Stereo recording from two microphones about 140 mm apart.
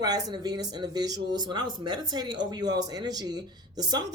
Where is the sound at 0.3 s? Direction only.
30° right (ahead or behind).